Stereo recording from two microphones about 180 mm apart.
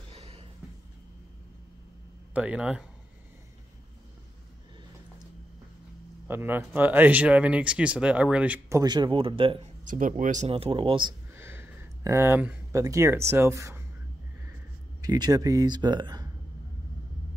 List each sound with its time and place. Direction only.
0.1 s a sound: 30° right (ahead or behind)
2.3 s speech: 5° right (ahead or behind)
6.2 s speech: 10° right (ahead or behind); by 9.7 s 30° right (ahead or behind)
9.8 s speech: 45° right (ahead or behind); by 11.1 s 30° right (ahead or behind)
11.3 s a sound: 15° right (ahead or behind)
12.8 s speech: 15° right (ahead or behind)
15.0 s speech: 20° right (ahead or behind)